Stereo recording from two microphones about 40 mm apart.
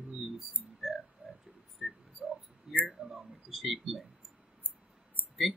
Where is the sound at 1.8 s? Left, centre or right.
Centre.